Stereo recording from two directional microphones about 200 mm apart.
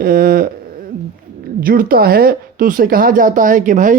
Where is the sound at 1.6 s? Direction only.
45° right (ahead or behind).